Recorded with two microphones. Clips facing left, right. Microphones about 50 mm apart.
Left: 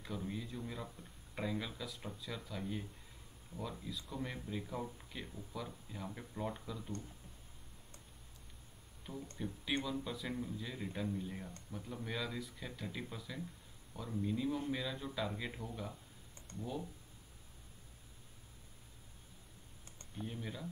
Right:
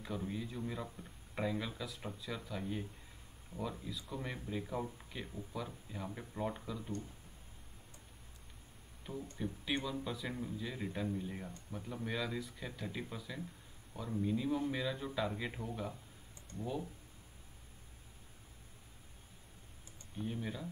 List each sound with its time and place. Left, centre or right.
0.0 s speech: centre
9.1 s speech: right
9.8 s speech: centre
20.2 s speech: centre